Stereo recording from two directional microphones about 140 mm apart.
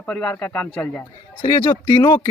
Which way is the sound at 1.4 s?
25° left (ahead or behind).